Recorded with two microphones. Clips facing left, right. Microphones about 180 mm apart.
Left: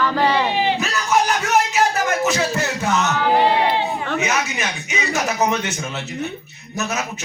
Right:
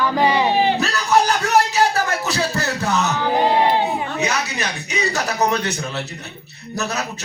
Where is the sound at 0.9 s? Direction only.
35° right (ahead or behind).